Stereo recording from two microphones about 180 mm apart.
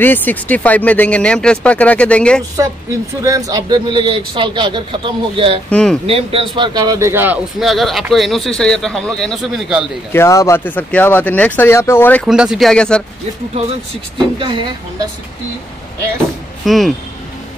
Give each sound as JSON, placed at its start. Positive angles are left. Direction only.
{"t": 0.0, "sound": "speech", "side_deg": 10}
{"t": 2.5, "sound": "speech", "side_deg": -20}
{"t": 5.7, "sound": "speech", "side_deg": 5}
{"t": 6.0, "sound": "speech", "side_deg": -30}
{"t": 7.6, "sound": "speech", "side_deg": 0}
{"t": 10.1, "sound": "speech", "side_deg": 15}
{"t": 12.3, "sound": "speech", "side_deg": -5}
{"t": 14.1, "sound": "speech", "side_deg": -25}
{"t": 16.6, "sound": "speech", "side_deg": 0}